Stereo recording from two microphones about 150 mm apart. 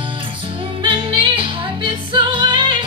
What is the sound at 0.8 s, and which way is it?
Music, 35° right (ahead or behind).